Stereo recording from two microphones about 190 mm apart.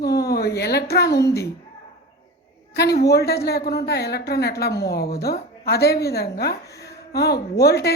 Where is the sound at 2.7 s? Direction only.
60° left (ahead or behind).